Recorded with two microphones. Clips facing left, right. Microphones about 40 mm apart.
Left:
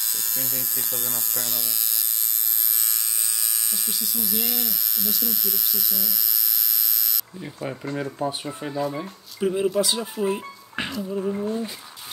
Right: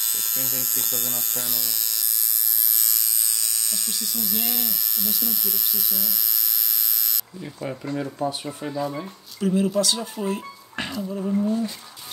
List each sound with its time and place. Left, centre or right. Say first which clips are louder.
0.0 s speech: right 1 dB; right
3.7 s speech: even; centre
7.6 s speech: even; centre
10.9 s speech: left 1 dB; centre
11.4 s speech: right 3 dB; centre